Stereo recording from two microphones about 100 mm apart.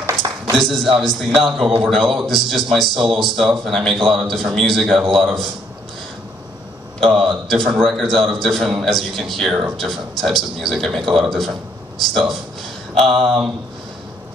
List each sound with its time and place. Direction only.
0.2 s a sound: 50° right (ahead or behind)
1.0 s a man's voice: centre (ahead or behind)
7.0 s a man's voice: centre (ahead or behind)